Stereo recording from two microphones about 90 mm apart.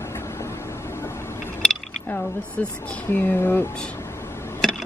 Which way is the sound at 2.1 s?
20° left (ahead or behind).